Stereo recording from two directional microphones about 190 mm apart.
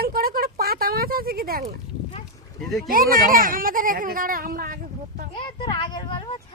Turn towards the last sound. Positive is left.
turn(degrees=25)  # may be behind; listen again after turning